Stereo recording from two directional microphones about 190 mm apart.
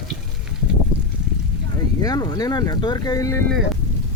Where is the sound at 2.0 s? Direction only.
20° left (ahead or behind).